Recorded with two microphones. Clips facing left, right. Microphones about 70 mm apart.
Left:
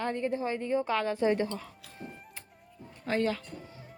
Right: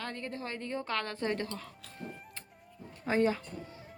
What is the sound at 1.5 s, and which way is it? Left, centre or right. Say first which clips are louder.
Music: left 3 dB; centre.